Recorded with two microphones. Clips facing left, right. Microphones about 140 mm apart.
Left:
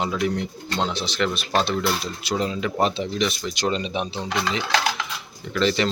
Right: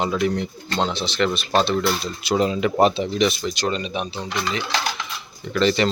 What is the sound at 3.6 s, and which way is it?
Speech, 25° left (ahead or behind).